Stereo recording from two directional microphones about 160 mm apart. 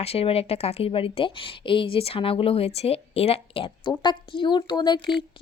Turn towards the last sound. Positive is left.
turn(degrees=25)  # may be behind; listen again after turning